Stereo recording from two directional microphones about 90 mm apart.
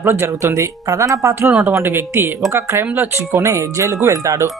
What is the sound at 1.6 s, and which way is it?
Speech, 25° right (ahead or behind).